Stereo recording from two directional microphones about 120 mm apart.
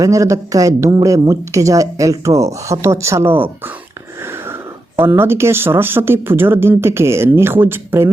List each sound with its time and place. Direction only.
0.0 s speech: 25° right (ahead or behind)
4.2 s wheeze: 20° right (ahead or behind)
4.9 s speech: 20° right (ahead or behind)